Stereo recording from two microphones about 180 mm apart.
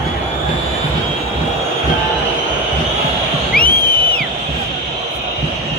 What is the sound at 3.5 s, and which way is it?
Music, 55° left (ahead or behind).